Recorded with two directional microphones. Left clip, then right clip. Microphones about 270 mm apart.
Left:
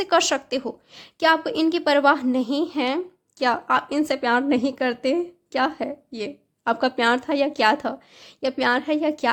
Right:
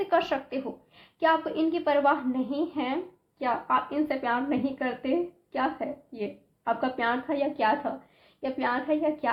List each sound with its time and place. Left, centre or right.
0.0 s a woman's voice: left